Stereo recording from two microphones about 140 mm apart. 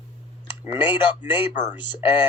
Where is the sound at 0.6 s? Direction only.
35° left (ahead or behind).